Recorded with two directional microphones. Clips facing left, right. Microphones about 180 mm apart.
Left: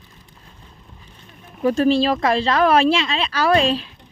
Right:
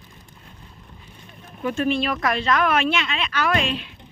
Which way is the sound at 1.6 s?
35° left (ahead or behind).